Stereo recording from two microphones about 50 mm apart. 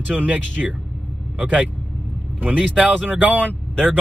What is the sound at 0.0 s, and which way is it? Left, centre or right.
Speech, right.